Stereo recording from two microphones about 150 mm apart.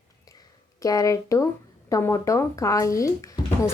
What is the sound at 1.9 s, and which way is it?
Speech, 20° left (ahead or behind).